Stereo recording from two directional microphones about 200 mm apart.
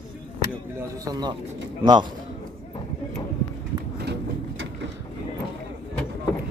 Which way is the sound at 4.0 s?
55° right (ahead or behind).